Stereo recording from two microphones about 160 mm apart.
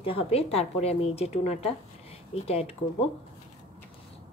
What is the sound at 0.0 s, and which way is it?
A woman's voice, 35° left (ahead or behind).